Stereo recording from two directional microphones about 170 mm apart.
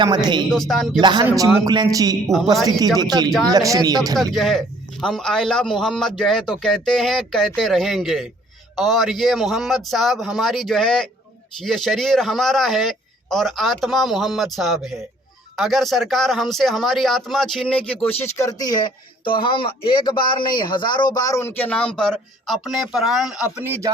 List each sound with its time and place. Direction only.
0.0 s a man's voice: 25° right (ahead or behind)
0.5 s speech: centre (ahead or behind)
1.0 s a man's voice: 25° right (ahead or behind)
3.2 s speech: centre (ahead or behind)
3.5 s a man's voice: 20° right (ahead or behind)
4.2 s speech: centre (ahead or behind)